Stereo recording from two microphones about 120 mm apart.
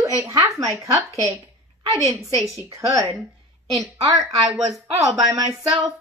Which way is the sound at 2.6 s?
25° right (ahead or behind).